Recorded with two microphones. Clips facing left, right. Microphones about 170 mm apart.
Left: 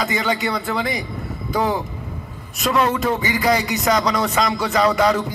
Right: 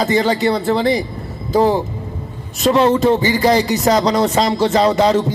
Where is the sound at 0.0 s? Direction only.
30° right (ahead or behind).